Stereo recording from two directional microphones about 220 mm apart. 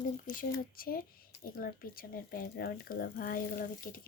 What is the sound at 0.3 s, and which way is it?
Speech, 40° left (ahead or behind).